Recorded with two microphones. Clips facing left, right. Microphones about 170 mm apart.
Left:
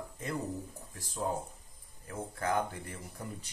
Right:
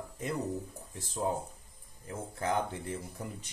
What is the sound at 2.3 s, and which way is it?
Speech, 25° right (ahead or behind).